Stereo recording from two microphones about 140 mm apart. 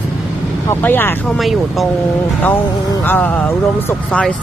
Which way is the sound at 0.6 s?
15° left (ahead or behind).